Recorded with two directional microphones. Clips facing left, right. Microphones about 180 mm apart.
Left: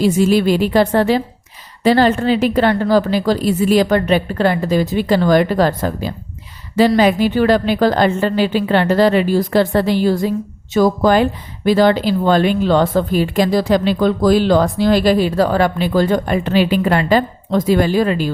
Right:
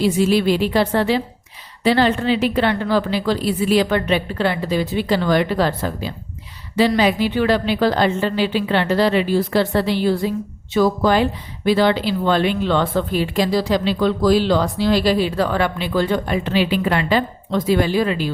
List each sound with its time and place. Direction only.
0.0 s speech: 45° left (ahead or behind)